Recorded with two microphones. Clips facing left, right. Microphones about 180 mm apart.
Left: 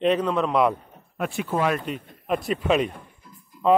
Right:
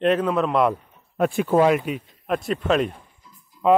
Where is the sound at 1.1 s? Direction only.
50° right (ahead or behind).